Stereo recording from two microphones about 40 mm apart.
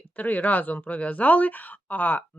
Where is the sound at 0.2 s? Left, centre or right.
Left.